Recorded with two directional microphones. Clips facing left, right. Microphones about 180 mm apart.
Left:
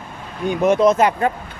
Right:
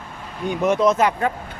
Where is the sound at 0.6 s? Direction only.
25° left (ahead or behind).